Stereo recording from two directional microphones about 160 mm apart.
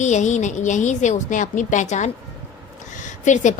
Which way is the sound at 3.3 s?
50° left (ahead or behind).